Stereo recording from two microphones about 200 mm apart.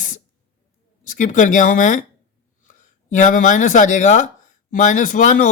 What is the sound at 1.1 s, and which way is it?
Speech, 40° left (ahead or behind).